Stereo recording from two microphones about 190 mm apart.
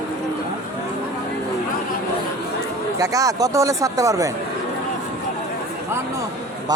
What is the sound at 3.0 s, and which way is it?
Speech, 15° right (ahead or behind).